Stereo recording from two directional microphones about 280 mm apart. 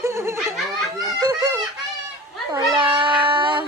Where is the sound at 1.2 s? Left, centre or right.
Centre.